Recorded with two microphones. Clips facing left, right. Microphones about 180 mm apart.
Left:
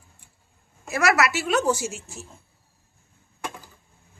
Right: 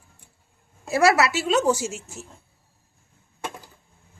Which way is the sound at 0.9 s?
30° right (ahead or behind).